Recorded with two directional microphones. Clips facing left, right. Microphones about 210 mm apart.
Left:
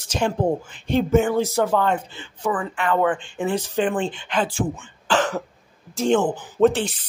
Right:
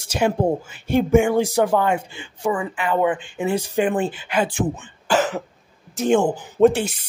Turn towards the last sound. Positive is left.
turn(degrees=-10)  # may be behind; listen again after turning